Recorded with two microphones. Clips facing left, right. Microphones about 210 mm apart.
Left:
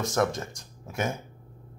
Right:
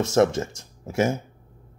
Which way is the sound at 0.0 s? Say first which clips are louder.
Right 7 dB; 25° right (ahead or behind).